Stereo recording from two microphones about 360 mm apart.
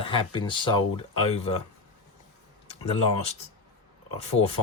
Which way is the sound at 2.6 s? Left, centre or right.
Centre.